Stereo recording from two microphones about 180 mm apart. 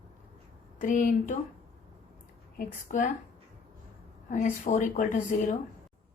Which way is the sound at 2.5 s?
45° left (ahead or behind).